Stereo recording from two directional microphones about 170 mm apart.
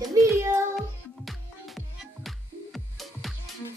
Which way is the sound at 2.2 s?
Centre (ahead or behind).